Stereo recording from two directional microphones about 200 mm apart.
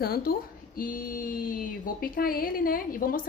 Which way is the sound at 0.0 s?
50° left (ahead or behind).